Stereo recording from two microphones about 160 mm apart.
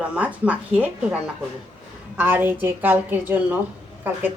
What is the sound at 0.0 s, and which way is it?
Speech, 10° right (ahead or behind).